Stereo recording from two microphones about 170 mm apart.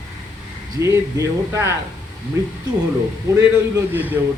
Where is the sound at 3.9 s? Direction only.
10° right (ahead or behind).